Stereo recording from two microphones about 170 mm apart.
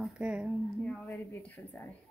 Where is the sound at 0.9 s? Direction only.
10° left (ahead or behind).